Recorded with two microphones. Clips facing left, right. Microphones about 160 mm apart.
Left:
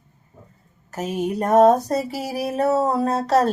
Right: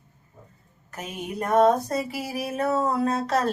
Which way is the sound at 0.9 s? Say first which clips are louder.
Left 8 dB; 40° left (ahead or behind).